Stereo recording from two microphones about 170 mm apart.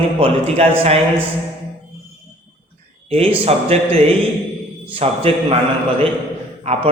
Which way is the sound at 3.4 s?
35° right (ahead or behind).